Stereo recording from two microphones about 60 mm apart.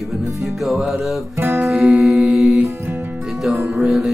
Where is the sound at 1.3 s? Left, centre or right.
Right.